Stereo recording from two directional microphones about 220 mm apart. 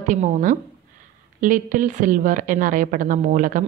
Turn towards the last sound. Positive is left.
turn(degrees=-35)  # may be behind; listen again after turning